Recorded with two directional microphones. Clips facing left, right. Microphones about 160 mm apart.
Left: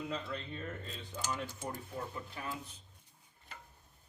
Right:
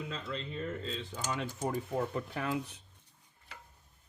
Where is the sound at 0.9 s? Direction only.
90° right.